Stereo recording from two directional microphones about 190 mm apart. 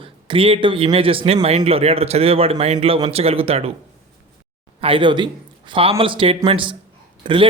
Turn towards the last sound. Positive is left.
turn(degrees=-25)  # may be behind; listen again after turning